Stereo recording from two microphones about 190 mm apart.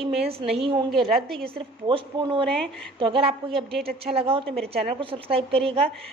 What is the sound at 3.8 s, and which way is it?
Speech, 55° right (ahead or behind).